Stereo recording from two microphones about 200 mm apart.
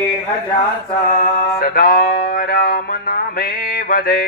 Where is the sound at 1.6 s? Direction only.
45° left (ahead or behind).